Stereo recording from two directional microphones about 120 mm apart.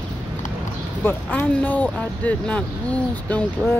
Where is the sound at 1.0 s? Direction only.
15° left (ahead or behind).